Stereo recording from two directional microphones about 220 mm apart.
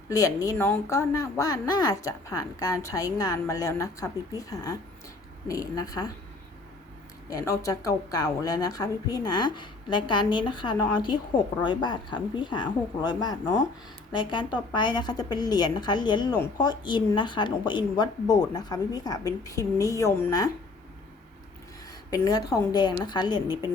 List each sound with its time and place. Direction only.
0.1 s speech: 15° left (ahead or behind)
7.3 s a woman's voice: 15° left (ahead or behind)
22.1 s a woman's voice: 15° left (ahead or behind)